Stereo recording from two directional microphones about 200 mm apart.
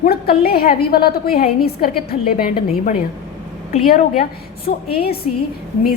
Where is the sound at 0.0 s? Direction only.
50° left (ahead or behind).